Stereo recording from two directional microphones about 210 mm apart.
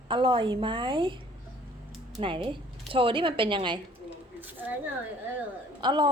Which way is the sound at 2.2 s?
25° right (ahead or behind).